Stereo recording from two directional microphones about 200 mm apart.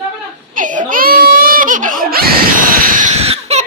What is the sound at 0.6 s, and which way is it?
Baby cry, 40° right (ahead or behind).